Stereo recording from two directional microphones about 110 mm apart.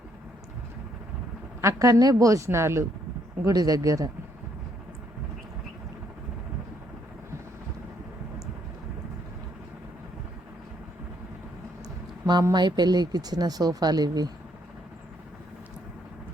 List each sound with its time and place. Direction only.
1.6 s a woman's voice: 30° right (ahead or behind)
3.4 s speech: 35° right (ahead or behind)
12.3 s speech: 40° right (ahead or behind)